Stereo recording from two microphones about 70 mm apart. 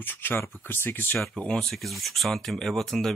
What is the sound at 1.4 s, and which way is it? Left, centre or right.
Speech, centre.